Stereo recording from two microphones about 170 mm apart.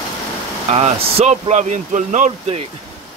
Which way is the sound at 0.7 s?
35° right (ahead or behind).